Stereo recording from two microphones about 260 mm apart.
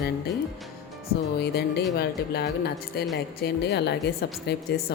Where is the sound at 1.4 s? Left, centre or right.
Left.